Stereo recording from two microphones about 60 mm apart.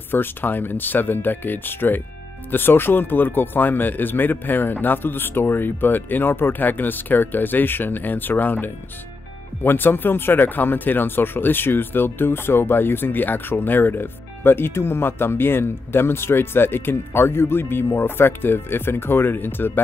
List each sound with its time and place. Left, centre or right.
0.1 s speech: left